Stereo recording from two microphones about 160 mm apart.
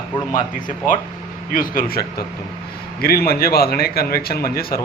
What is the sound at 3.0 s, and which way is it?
A man's voice, 70° left (ahead or behind).